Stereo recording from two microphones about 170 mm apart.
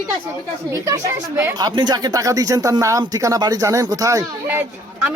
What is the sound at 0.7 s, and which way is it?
Speech, 15° right (ahead or behind).